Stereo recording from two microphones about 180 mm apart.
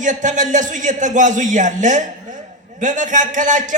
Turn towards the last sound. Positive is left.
turn(degrees=-45)  # may be behind; listen again after turning